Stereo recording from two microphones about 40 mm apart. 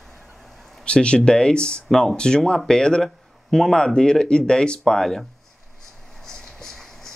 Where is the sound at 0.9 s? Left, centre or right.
Left.